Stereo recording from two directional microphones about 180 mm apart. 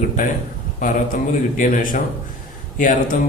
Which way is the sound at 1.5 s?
45° left (ahead or behind).